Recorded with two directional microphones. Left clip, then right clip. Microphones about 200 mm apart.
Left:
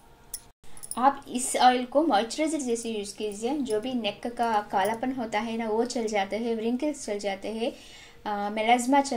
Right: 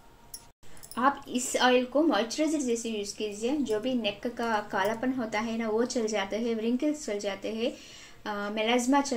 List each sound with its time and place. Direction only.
0.9 s a woman's voice: 30° left (ahead or behind)